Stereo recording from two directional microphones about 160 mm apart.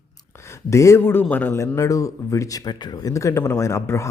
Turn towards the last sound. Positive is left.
turn(degrees=20)  # may be behind; listen again after turning